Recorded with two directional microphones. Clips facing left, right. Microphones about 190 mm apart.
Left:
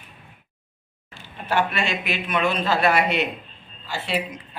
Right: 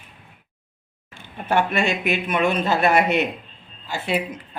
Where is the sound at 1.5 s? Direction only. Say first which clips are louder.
Right 3 dB; 50° right (ahead or behind).